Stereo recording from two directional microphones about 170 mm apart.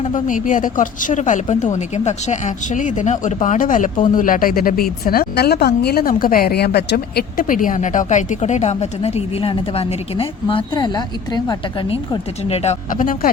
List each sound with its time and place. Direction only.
0.0 s a woman's voice: 50° left (ahead or behind); by 12.2 s 25° left (ahead or behind)
12.9 s a woman's voice: 55° left (ahead or behind)